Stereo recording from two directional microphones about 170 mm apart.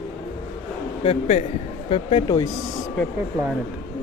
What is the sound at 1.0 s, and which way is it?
Speech, 40° left (ahead or behind).